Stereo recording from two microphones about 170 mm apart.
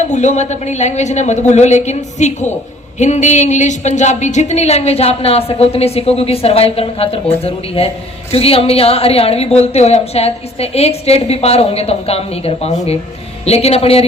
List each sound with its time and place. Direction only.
0.0 s a woman's voice: 45° left (ahead or behind)